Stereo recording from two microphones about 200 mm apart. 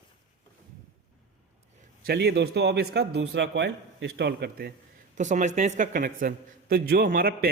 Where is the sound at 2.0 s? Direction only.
55° right (ahead or behind).